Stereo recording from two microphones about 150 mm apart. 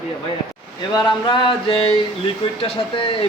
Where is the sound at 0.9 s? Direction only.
30° left (ahead or behind).